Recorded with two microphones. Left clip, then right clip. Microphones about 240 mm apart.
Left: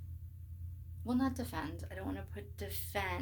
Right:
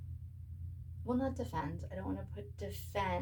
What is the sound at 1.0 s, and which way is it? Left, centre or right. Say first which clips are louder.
A woman's voice: even; left.